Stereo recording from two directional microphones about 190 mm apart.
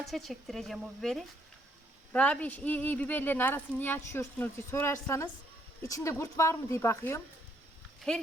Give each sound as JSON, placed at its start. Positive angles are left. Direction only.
{"t": 0.0, "sound": "speech", "side_deg": 0}